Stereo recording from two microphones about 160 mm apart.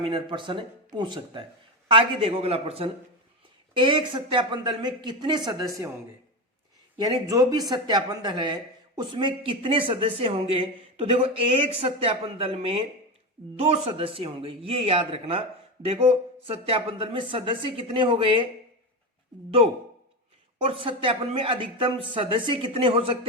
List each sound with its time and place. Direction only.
0.0 s speech: 30° right (ahead or behind)
7.3 s speech: 25° right (ahead or behind)
19.5 s speech: 35° right (ahead or behind)